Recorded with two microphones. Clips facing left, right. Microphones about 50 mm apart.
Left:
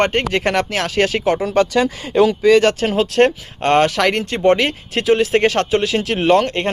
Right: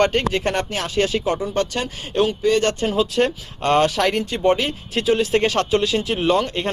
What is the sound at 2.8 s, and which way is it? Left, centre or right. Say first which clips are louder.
Speech: left 5 dB; left.